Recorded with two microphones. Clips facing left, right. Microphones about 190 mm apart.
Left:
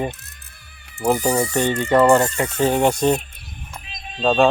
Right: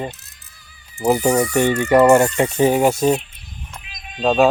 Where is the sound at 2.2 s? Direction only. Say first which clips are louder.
Right 5 dB; 30° right (ahead or behind).